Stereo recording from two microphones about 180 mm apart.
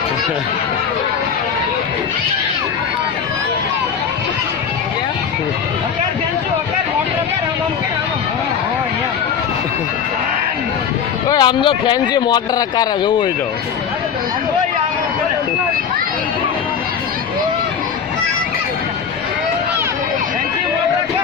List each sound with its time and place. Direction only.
11.3 s speech: 25° left (ahead or behind)